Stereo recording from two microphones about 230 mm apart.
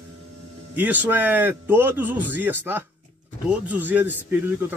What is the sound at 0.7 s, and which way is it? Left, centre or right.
Speech, centre.